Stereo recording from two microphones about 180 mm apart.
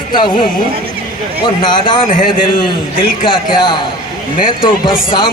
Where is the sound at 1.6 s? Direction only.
25° left (ahead or behind).